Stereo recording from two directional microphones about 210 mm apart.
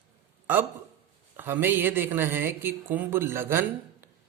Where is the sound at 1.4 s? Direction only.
10° right (ahead or behind).